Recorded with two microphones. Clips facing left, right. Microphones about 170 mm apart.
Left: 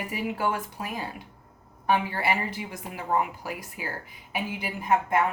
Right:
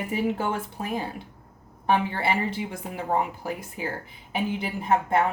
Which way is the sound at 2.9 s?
40° right (ahead or behind).